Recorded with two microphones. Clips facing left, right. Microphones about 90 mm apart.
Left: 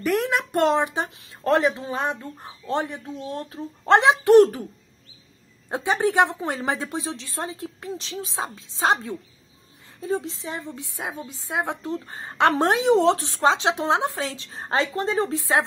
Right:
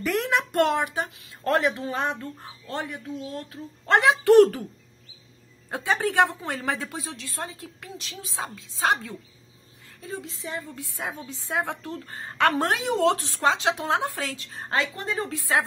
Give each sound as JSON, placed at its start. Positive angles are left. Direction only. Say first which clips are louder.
{"t": 0.0, "sound": "a sound", "louder": "left 2 dB", "side_deg": 5}
{"t": 0.5, "sound": "a woman's voice", "louder": "left 5 dB", "side_deg": 20}
{"t": 5.7, "sound": "a woman's voice", "louder": "left 3 dB", "side_deg": 20}